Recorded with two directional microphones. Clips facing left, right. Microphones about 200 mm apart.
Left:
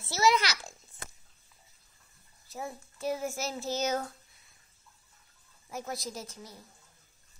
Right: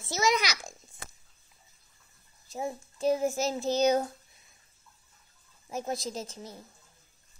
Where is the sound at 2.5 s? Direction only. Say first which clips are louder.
Right 5 dB; 20° right (ahead or behind).